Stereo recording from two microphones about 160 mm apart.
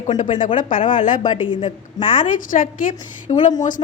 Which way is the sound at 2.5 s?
60° left (ahead or behind).